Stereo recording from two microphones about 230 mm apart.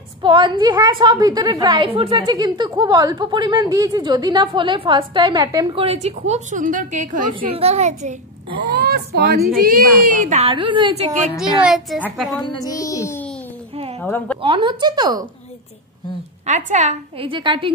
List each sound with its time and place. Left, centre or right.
0.2 s a woman's voice: right
8.6 s a woman's voice: right
11.6 s a woman's voice: centre
12.4 s music: centre
13.9 s a woman's voice: centre
14.4 s a woman's voice: right
16.4 s a woman's voice: right